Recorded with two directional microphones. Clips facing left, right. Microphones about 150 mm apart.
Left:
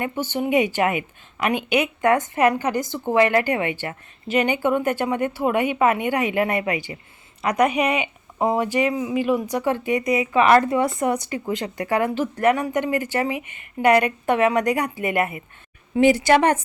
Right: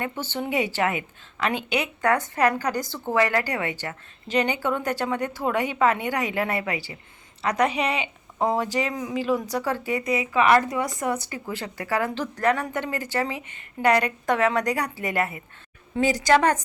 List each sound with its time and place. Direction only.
0.0 s a woman's voice: 15° left (ahead or behind)